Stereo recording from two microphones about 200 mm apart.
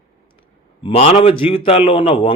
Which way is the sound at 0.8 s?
30° left (ahead or behind).